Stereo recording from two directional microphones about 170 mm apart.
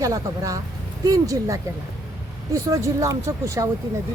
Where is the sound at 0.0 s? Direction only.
20° right (ahead or behind).